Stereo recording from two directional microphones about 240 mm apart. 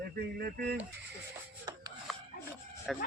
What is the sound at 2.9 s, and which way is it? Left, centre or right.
Speech, centre.